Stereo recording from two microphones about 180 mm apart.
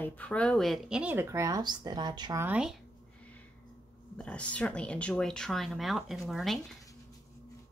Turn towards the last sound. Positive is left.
turn(degrees=0)  # may be behind; listen again after turning